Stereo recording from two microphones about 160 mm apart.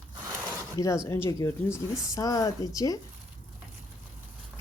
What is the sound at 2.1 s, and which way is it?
Speech, 20° left (ahead or behind).